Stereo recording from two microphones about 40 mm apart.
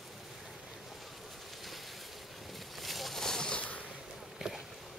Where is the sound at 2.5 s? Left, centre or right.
Centre.